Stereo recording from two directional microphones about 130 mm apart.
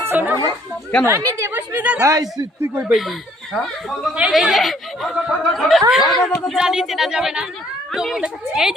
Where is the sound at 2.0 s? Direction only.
25° right (ahead or behind).